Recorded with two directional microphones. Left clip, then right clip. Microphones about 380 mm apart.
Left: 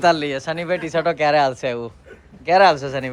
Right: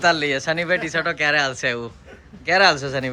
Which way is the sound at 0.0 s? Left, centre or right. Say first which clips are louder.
Left 1 dB; centre.